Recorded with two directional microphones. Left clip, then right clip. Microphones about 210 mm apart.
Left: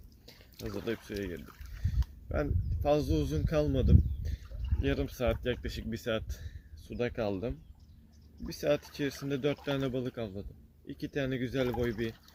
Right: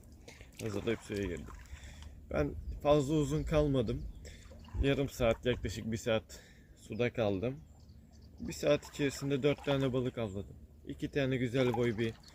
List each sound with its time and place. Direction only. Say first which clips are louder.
0.7 s a man's voice: even; 5° left (ahead or behind)